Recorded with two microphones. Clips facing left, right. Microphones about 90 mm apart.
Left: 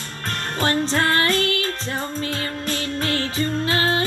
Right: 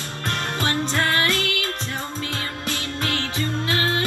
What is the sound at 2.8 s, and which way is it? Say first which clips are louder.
Music: left 4 dB; 30° left (ahead or behind).